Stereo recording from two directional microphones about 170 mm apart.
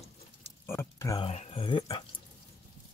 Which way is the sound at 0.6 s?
15° left (ahead or behind).